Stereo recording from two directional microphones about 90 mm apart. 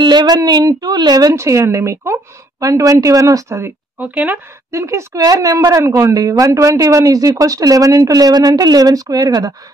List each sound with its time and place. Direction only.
0.0 s a woman's voice: 50° right (ahead or behind); by 3.7 s 30° right (ahead or behind)
4.0 s speech: 15° right (ahead or behind)
4.6 s a woman's voice: 35° right (ahead or behind)